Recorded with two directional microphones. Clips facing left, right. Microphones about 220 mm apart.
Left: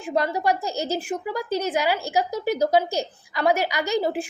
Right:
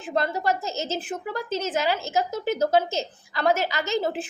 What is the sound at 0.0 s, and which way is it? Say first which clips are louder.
A woman's voice: left 2 dB; 15° left (ahead or behind).